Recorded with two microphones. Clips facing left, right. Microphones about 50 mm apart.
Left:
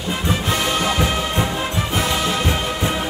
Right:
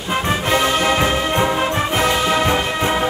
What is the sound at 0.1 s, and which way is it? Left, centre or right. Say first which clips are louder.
Music: right 4 dB; right.